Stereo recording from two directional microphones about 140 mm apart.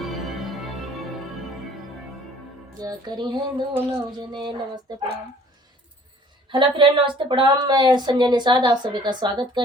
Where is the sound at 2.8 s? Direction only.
30° right (ahead or behind).